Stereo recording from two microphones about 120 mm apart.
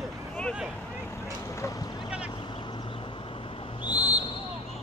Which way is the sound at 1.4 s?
25° left (ahead or behind).